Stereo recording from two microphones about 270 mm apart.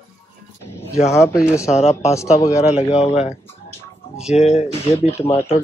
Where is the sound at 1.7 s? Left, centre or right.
Left.